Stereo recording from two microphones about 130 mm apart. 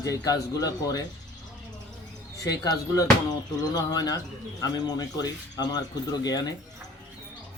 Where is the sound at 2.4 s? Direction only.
30° left (ahead or behind).